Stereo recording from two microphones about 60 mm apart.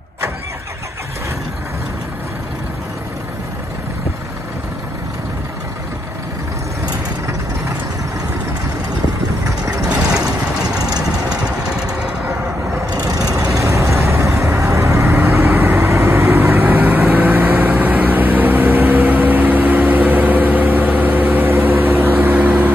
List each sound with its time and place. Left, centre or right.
11.1 s vehicle: centre
13.3 s vehicle: right
15.0 s vehicle: right